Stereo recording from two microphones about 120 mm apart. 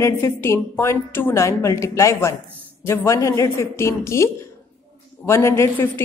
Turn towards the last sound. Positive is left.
turn(degrees=20)  # may be behind; listen again after turning